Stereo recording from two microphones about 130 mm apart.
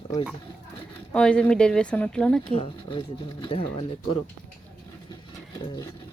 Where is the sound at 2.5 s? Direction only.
45° left (ahead or behind).